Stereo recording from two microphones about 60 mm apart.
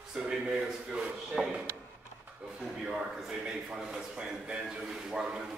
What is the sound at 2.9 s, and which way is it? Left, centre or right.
Speech, centre.